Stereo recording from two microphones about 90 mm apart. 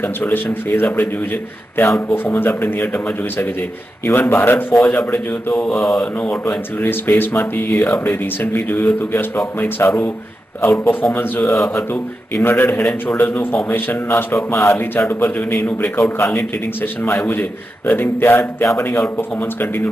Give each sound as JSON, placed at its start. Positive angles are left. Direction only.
{"t": 0.0, "sound": "speech", "side_deg": 25}
{"t": 6.5, "sound": "speech", "side_deg": 20}
{"t": 19.1, "sound": "speech", "side_deg": 25}